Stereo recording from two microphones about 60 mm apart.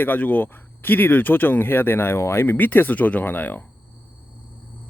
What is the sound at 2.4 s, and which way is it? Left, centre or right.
Speech, left.